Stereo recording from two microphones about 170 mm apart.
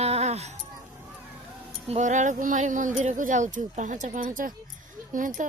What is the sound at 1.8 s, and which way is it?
Speech, 40° right (ahead or behind).